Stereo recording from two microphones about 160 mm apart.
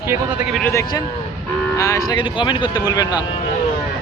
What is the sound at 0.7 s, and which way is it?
Speech, 20° left (ahead or behind).